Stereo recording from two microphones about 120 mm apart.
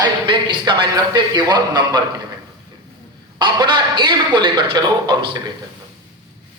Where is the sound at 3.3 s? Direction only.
40° right (ahead or behind).